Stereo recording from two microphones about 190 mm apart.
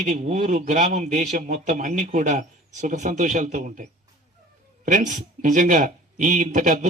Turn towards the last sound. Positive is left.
turn(degrees=-45)  # may be behind; listen again after turning